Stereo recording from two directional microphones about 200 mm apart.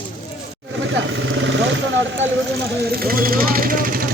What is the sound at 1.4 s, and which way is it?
Speech, 65° right (ahead or behind).